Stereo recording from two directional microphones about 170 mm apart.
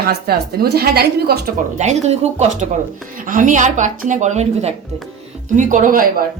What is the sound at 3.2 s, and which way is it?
Speech, 55° right (ahead or behind).